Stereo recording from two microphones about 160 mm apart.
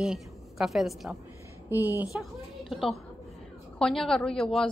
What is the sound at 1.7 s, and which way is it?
Speech, 10° right (ahead or behind).